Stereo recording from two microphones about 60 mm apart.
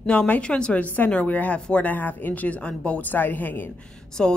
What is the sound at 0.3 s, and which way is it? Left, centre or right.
Speech, centre.